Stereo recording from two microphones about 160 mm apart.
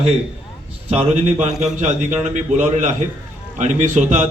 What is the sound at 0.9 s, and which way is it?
A man's voice, 45° right (ahead or behind).